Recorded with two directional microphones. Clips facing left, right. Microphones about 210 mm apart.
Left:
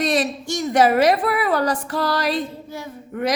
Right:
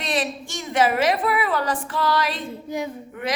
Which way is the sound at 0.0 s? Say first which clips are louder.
Left 5 dB; 40° left (ahead or behind).